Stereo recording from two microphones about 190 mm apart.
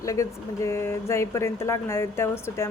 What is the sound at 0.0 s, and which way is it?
Speech, 15° left (ahead or behind).